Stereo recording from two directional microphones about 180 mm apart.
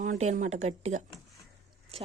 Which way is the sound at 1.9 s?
35° right (ahead or behind).